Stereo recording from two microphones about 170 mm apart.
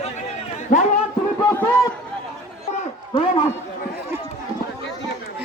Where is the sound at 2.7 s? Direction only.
35° left (ahead or behind).